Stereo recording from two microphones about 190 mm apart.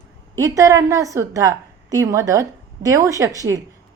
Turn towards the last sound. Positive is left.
turn(degrees=-20)  # may be behind; listen again after turning